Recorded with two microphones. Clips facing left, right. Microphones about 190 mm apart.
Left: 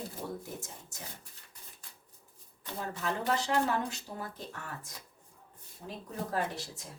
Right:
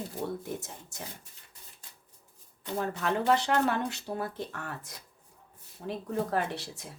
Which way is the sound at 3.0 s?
65° right (ahead or behind).